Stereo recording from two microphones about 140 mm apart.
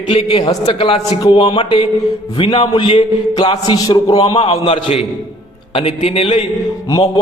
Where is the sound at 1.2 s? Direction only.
30° left (ahead or behind).